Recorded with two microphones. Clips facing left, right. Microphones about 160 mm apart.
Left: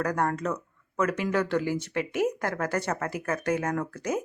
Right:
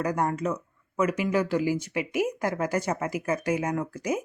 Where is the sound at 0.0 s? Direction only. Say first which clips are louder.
Right 1 dB; 10° right (ahead or behind).